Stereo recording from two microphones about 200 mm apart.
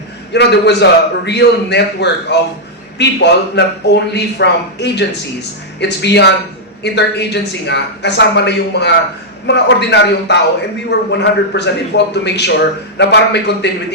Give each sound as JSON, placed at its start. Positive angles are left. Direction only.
{"t": 0.3, "sound": "a man's voice", "side_deg": 55}